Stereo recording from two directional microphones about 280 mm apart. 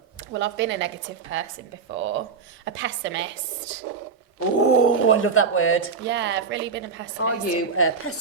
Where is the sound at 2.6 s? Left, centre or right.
Right.